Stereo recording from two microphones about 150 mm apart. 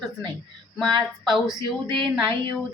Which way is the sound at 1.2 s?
Centre (ahead or behind).